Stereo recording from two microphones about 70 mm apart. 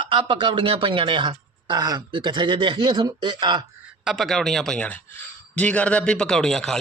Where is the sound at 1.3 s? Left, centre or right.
Right.